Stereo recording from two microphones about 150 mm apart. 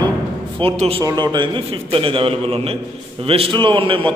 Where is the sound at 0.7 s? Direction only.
45° right (ahead or behind).